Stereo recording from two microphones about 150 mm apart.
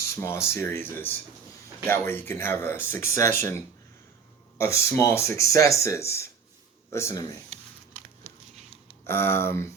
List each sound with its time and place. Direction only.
0.2 s speech: 20° left (ahead or behind)
9.0 s speech: 15° left (ahead or behind)